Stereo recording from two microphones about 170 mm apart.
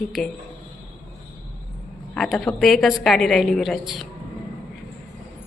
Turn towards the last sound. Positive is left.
turn(degrees=0)  # may be behind; listen again after turning